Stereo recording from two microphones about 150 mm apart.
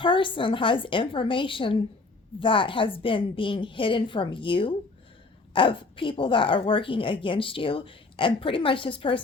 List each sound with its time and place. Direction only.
0.0 s speech: 35° left (ahead or behind)